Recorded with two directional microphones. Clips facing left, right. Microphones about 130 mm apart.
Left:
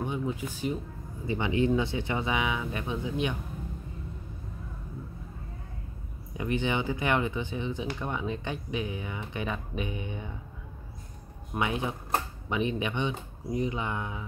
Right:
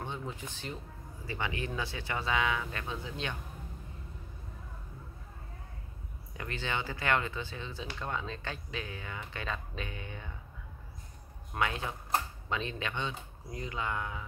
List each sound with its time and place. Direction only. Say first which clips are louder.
0.0 s speech: left 8 dB; 10° left (ahead or behind)
6.3 s speech: left 8 dB; 15° left (ahead or behind)
11.5 s speech: left 4 dB; 15° left (ahead or behind)